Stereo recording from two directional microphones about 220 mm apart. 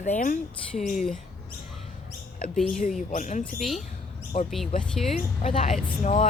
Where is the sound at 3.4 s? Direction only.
Centre (ahead or behind).